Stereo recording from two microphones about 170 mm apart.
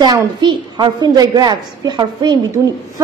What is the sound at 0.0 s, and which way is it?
A woman's voice, 25° right (ahead or behind).